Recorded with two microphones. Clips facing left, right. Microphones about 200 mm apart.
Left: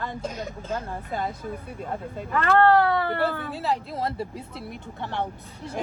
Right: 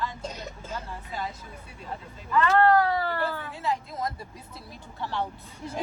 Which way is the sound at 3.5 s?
35° left (ahead or behind).